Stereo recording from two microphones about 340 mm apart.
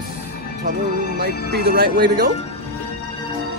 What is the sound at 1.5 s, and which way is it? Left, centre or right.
Speech, right.